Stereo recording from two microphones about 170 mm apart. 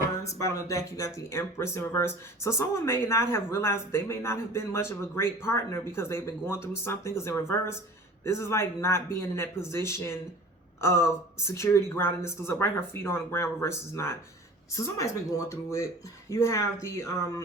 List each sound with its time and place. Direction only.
0.3 s speech: 20° left (ahead or behind)